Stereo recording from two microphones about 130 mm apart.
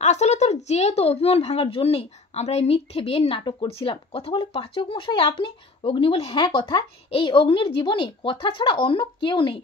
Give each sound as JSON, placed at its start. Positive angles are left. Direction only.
{"t": 0.0, "sound": "a woman's voice", "side_deg": 60}